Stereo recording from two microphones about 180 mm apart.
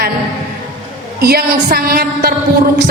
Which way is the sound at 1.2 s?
55° right (ahead or behind).